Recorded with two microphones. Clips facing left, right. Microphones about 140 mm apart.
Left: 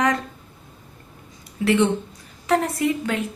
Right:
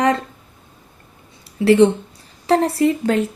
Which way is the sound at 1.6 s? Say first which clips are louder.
Right 7 dB; 35° right (ahead or behind).